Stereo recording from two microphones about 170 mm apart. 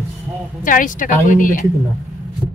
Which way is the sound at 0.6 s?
50° left (ahead or behind).